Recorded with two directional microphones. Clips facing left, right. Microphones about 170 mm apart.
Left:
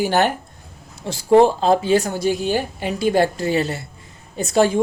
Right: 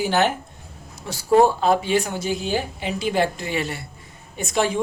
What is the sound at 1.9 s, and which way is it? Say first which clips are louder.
Speech: left 4 dB; 40° left (ahead or behind).